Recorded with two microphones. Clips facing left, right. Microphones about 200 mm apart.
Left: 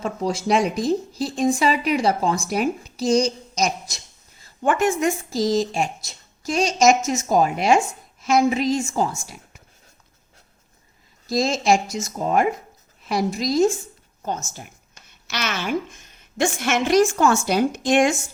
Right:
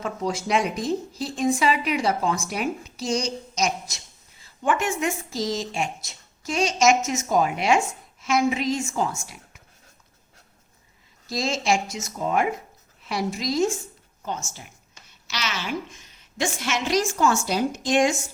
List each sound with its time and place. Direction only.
0.0 s speech: 35° left (ahead or behind)
11.3 s speech: 40° left (ahead or behind)
14.2 s a sound: 40° left (ahead or behind)
15.3 s a woman's voice: 55° left (ahead or behind)